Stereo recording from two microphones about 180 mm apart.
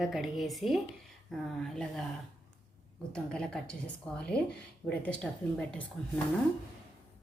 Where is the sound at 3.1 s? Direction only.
5° left (ahead or behind).